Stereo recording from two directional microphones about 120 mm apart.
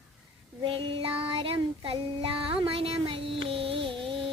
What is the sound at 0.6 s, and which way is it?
Child singing, 50° right (ahead or behind).